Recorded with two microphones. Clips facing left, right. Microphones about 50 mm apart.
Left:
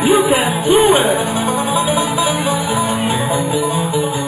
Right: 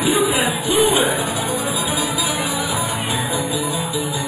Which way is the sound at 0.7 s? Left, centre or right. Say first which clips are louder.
Left 6 dB; left.